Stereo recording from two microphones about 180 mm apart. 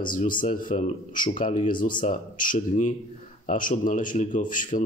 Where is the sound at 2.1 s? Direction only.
45° left (ahead or behind).